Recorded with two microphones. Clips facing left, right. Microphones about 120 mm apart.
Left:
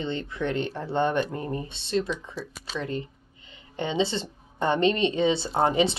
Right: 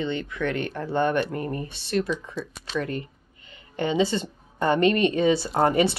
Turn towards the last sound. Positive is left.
turn(degrees=20)  # may be behind; listen again after turning